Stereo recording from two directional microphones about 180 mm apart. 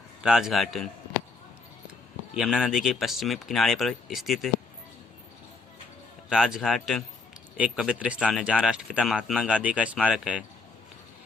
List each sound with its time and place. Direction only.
0.2 s speech: 5° right (ahead or behind)
2.3 s speech: 5° right (ahead or behind)
6.2 s speech: 5° right (ahead or behind)